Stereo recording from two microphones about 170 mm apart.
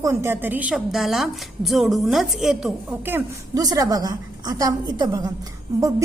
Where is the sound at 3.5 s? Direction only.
20° right (ahead or behind).